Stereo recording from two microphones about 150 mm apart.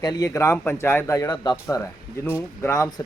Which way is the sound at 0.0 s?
25° left (ahead or behind).